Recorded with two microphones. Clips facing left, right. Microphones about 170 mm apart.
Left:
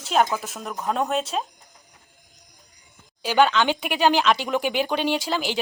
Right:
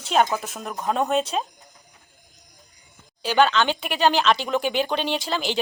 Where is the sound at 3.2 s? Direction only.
10° left (ahead or behind).